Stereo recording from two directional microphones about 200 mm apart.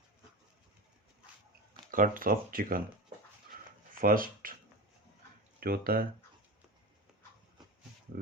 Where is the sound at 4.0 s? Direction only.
45° right (ahead or behind).